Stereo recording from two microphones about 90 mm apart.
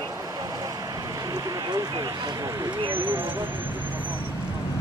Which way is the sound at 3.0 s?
65° right (ahead or behind).